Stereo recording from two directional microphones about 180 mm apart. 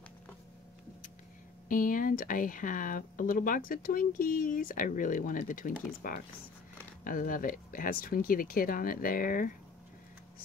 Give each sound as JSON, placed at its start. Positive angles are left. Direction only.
{"t": 1.7, "sound": "speech", "side_deg": 50}